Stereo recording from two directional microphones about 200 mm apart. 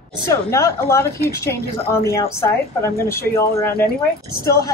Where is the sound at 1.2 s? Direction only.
50° left (ahead or behind).